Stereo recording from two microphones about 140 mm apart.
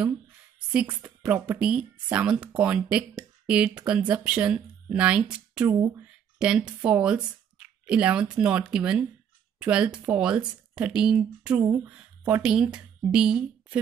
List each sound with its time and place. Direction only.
0.7 s speech: 10° right (ahead or behind)
5.7 s speech: 20° right (ahead or behind)
6.4 s speech: 5° right (ahead or behind)
11.5 s speech: 20° right (ahead or behind)
11.9 s speech: 10° right (ahead or behind)